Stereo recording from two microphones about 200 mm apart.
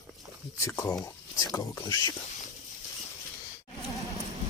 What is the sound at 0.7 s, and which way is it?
Speech, 15° left (ahead or behind).